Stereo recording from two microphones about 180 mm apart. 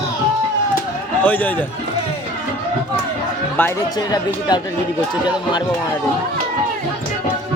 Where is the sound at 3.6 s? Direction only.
15° left (ahead or behind).